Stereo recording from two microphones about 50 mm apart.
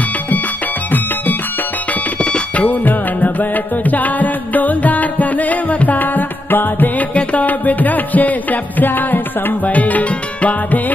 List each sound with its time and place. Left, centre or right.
2.3 s music: left